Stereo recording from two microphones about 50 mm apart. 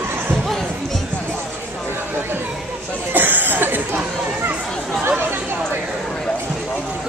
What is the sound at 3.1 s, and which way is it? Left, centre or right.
Cough, right.